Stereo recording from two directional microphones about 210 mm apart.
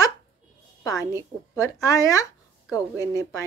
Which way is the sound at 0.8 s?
15° left (ahead or behind).